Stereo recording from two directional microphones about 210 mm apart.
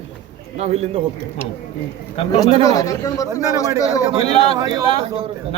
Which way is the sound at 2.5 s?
25° right (ahead or behind).